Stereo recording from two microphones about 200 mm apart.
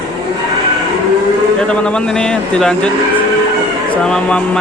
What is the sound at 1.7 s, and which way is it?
Speech, 5° left (ahead or behind).